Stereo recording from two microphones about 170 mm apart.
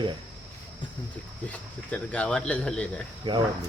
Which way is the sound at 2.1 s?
5° left (ahead or behind).